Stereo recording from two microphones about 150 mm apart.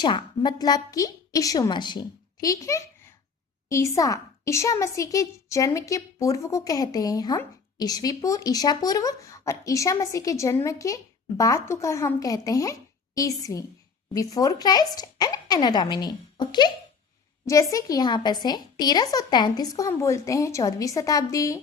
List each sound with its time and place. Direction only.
0.0 s a woman's voice: 30° left (ahead or behind)